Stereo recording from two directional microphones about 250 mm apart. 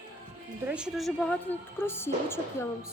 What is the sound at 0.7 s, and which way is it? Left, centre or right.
A woman's voice, centre.